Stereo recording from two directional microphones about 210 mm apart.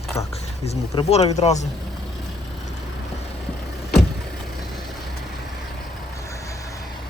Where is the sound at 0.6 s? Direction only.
30° left (ahead or behind).